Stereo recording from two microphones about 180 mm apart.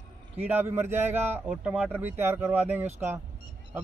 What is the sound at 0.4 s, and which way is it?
A man's voice, 10° right (ahead or behind).